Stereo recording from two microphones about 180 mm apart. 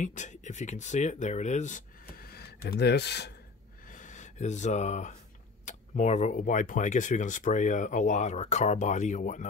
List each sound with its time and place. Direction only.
0.0 s speech: 40° left (ahead or behind); by 3.3 s 65° left (ahead or behind)
3.8 s a sound: 45° left (ahead or behind)
5.7 s speech: 40° left (ahead or behind)